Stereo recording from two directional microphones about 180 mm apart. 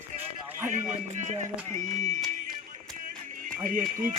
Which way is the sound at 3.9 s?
45° right (ahead or behind).